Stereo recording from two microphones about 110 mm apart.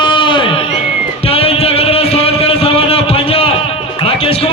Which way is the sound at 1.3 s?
65° left (ahead or behind).